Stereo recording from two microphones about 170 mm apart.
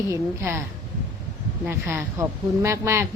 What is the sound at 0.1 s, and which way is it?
Speech, 15° right (ahead or behind).